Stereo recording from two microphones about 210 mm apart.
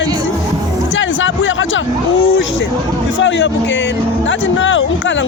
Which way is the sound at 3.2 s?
60° left (ahead or behind).